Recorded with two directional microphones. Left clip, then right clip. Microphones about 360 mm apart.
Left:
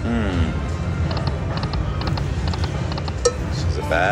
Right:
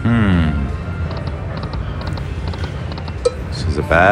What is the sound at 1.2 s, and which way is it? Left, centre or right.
Typing, centre.